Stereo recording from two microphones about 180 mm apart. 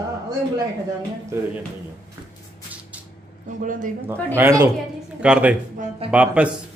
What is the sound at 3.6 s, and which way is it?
Speech, 50° right (ahead or behind).